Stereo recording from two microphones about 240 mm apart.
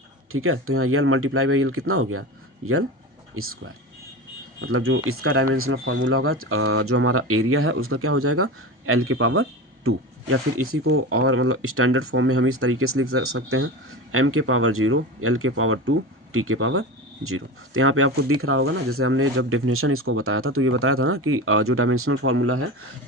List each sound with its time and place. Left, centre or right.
0.3 s speech: right
3.3 s speech: right